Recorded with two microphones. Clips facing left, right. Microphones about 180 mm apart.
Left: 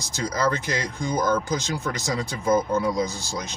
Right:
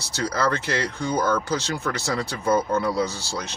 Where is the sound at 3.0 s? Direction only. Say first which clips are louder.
Right 1 dB; 70° right (ahead or behind).